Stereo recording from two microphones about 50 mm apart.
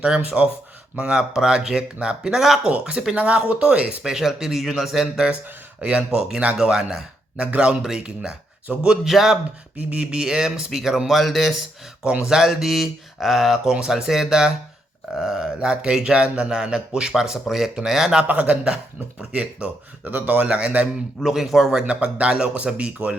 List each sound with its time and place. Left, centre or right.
0.0 s speech: right
2.6 s speech: right
7.8 s speech: centre
9.0 s speech: centre
9.7 s speech: right; by 15.7 s centre
15.7 s speech: centre
18.3 s speech: right
20.2 s speech: right
21.2 s speech: centre
21.8 s speech: right